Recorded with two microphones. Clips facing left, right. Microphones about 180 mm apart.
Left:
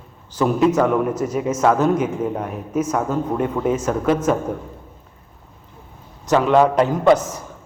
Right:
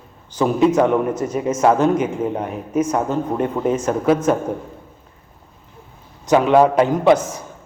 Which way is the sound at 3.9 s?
10° right (ahead or behind).